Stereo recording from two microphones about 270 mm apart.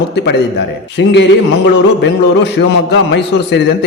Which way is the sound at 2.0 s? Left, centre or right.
Left.